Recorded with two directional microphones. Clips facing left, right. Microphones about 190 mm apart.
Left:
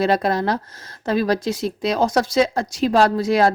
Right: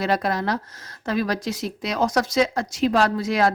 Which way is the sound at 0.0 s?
30° left (ahead or behind).